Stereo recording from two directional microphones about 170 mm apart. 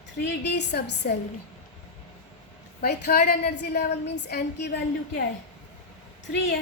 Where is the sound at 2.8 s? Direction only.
65° left (ahead or behind); by 4.8 s 90° left.